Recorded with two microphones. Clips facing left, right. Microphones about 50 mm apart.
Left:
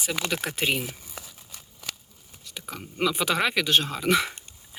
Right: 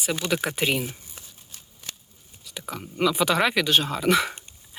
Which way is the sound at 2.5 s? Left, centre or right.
Centre.